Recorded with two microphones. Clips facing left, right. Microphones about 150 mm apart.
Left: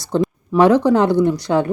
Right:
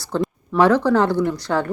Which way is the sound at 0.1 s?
20° left (ahead or behind).